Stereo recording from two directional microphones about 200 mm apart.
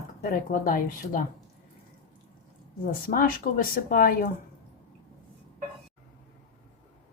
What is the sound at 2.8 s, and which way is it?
Speech, 45° left (ahead or behind).